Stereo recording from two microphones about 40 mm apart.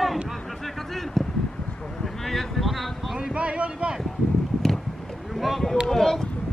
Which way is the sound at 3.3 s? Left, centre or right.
Right.